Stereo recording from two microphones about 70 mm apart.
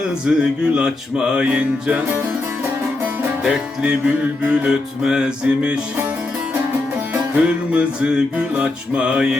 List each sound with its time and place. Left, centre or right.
0.3 s music: centre
3.4 s music: centre
7.1 s music: centre